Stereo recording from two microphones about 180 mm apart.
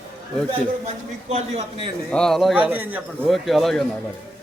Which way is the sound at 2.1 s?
5° left (ahead or behind).